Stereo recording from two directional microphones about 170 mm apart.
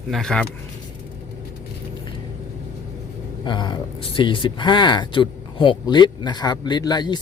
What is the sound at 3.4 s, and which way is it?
Speech, 25° left (ahead or behind).